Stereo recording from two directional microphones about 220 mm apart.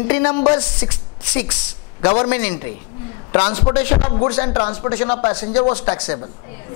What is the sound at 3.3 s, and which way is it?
Speech, 20° left (ahead or behind).